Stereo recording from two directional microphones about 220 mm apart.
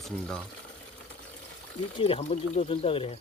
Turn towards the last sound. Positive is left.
turn(degrees=25)  # may be behind; listen again after turning